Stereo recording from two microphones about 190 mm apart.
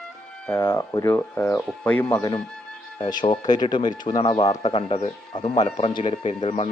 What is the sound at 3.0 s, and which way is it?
Speech, 25° left (ahead or behind).